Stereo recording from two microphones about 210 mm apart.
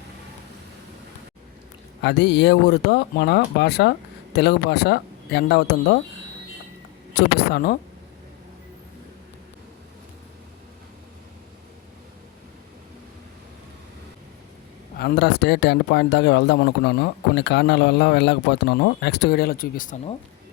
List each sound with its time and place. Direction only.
2.0 s speech: 55° left (ahead or behind)
7.1 s speech: 50° left (ahead or behind)
14.9 s speech: 50° left (ahead or behind)